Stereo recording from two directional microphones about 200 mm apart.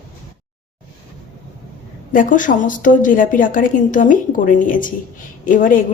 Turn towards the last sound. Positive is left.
turn(degrees=45)  # may be behind; listen again after turning